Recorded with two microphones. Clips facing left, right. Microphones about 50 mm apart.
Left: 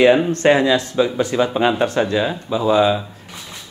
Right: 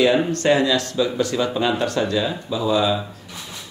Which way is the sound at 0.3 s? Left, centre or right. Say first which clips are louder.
Left 3 dB; left.